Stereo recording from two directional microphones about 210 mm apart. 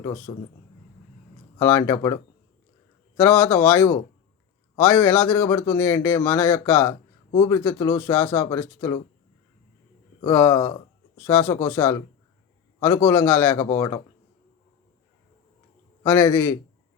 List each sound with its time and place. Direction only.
0.3 s a man's voice: 20° left (ahead or behind)
1.5 s speech: 10° left (ahead or behind)
3.2 s speech: 10° left (ahead or behind)
10.2 s speech: 15° left (ahead or behind)
16.0 s speech: 15° left (ahead or behind)